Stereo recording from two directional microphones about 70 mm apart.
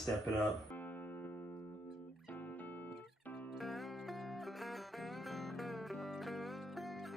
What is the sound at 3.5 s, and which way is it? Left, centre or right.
Music, centre.